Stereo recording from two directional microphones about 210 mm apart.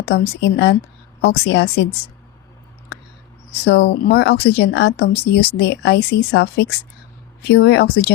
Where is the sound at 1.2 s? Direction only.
55° left (ahead or behind).